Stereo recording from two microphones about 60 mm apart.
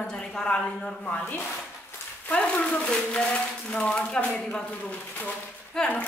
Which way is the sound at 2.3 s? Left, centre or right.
Centre.